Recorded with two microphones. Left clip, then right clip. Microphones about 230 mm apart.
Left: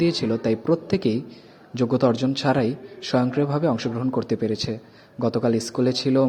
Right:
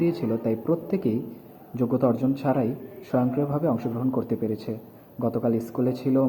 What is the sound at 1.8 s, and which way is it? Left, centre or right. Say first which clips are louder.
Speech: left 3 dB; left.